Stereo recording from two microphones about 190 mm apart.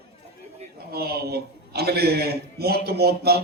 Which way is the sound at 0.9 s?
55° right (ahead or behind).